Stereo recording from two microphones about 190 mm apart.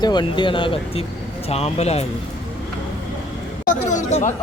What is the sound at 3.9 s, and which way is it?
Speech, 35° left (ahead or behind).